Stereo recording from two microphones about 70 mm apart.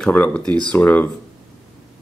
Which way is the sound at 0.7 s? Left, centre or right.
Left.